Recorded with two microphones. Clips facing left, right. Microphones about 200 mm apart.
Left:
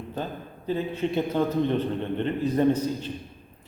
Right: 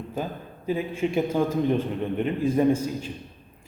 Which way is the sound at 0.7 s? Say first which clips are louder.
Right 1 dB; 10° right (ahead or behind).